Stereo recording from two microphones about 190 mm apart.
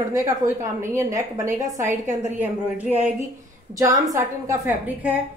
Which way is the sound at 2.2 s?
10° right (ahead or behind).